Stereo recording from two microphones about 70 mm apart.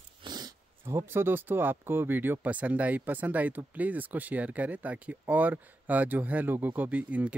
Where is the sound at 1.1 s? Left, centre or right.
Right.